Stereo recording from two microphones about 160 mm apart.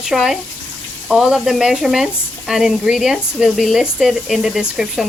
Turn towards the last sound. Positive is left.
turn(degrees=-5)  # may be behind; listen again after turning